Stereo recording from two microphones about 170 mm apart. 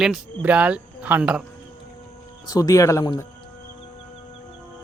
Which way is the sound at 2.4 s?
20° left (ahead or behind).